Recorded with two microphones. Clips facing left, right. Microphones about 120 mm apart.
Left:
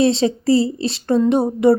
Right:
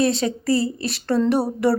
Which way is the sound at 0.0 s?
25° left (ahead or behind).